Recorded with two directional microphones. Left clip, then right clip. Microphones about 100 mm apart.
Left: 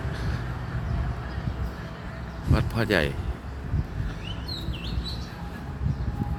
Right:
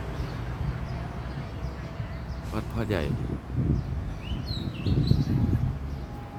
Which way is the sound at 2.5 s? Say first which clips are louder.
Left 6 dB; 20° left (ahead or behind).